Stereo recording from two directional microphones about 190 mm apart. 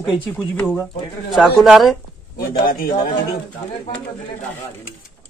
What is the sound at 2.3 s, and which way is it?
Speech, 50° left (ahead or behind).